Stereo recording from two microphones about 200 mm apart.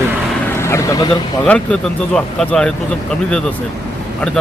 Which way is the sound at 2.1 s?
5° left (ahead or behind).